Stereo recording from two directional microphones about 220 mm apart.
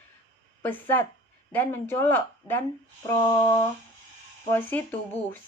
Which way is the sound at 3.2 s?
20° left (ahead or behind).